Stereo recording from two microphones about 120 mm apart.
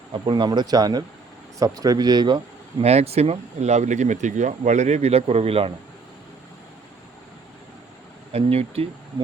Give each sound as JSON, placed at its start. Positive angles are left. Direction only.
{"t": 0.1, "sound": "speech", "side_deg": -40}
{"t": 2.8, "sound": "speech", "side_deg": -60}
{"t": 8.3, "sound": "speech", "side_deg": -55}